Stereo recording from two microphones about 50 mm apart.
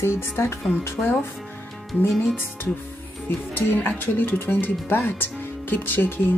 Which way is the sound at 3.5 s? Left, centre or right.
Left.